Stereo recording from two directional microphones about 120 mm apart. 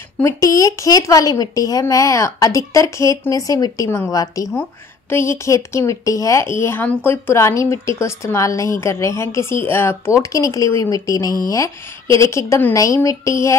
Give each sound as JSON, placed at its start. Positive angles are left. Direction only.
{"t": 0.2, "sound": "speech", "side_deg": 25}